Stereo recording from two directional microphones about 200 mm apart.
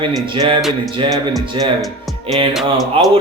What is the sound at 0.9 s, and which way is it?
Speech, 25° right (ahead or behind).